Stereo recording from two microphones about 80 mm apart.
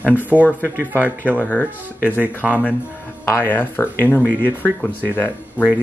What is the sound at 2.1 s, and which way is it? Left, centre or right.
Speech, centre.